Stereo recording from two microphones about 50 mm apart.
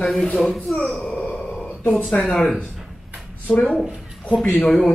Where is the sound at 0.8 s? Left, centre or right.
Left.